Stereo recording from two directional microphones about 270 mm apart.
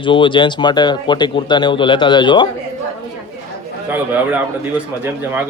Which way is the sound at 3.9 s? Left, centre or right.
Centre.